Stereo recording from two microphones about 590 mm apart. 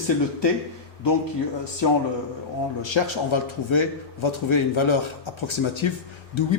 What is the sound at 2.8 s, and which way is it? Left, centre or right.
A man's voice, left.